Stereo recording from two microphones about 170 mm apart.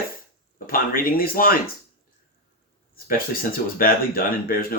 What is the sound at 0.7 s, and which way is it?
Speech, 60° left (ahead or behind).